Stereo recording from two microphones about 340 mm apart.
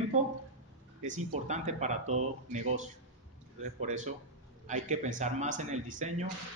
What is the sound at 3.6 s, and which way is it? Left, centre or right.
A man's voice, right.